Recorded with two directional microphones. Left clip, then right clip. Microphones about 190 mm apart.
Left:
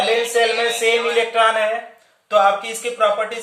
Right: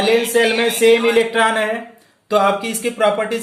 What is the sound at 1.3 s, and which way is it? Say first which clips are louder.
Speech: even; 40° right (ahead or behind).